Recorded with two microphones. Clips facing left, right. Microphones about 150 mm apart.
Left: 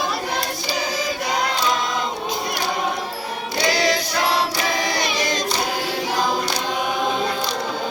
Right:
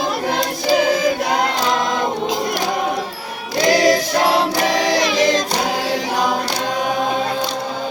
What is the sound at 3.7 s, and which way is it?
Choir, 45° right (ahead or behind).